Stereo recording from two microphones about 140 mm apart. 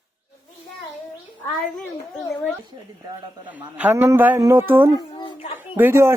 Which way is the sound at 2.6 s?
35° right (ahead or behind).